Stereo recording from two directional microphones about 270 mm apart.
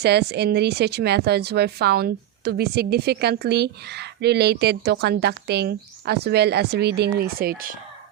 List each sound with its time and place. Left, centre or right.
0.0 s speech: right